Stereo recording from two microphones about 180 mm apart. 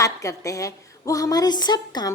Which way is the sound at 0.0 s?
20° left (ahead or behind).